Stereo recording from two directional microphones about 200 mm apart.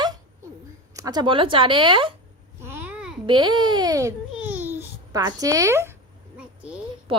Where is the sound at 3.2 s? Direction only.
25° right (ahead or behind).